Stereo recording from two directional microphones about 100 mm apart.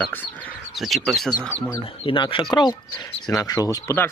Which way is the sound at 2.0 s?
60° left (ahead or behind).